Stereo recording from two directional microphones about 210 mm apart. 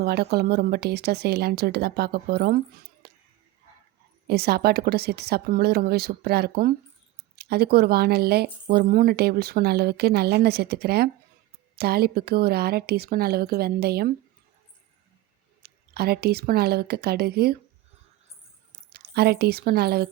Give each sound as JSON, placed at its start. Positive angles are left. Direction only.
{"t": 0.0, "sound": "speech", "side_deg": -50}
{"t": 4.3, "sound": "speech", "side_deg": -50}
{"t": 15.6, "sound": "speech", "side_deg": -50}
{"t": 18.9, "sound": "a woman's voice", "side_deg": -50}